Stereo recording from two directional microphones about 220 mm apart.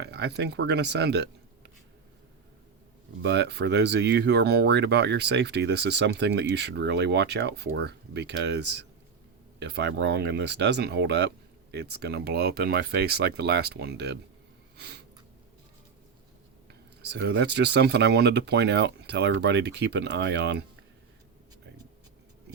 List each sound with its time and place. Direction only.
0.0 s speech: 50° right (ahead or behind)
3.2 s speech: 50° right (ahead or behind)
14.8 s a sound: 50° right (ahead or behind)
16.6 s speech: 50° right (ahead or behind)